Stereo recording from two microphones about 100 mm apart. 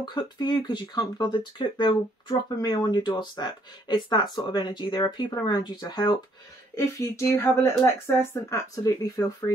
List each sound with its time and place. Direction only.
0.0 s speech: 45° left (ahead or behind)
6.7 s speech: 30° left (ahead or behind)